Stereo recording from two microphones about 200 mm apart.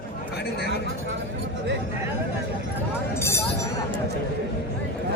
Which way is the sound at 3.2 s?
10° left (ahead or behind).